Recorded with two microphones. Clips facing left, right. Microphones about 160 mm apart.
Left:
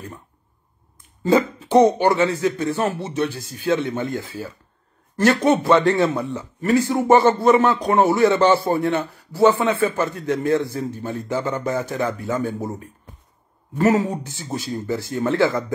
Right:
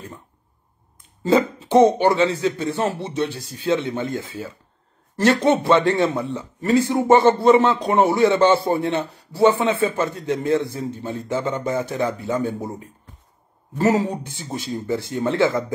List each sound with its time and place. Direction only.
1.2 s a man's voice: 25° right (ahead or behind)
13.7 s a man's voice: 25° right (ahead or behind)
14.1 s a woman's voice: 25° left (ahead or behind)
14.4 s a man's voice: 25° right (ahead or behind)